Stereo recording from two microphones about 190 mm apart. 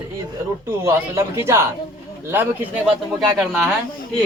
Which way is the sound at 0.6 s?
15° right (ahead or behind).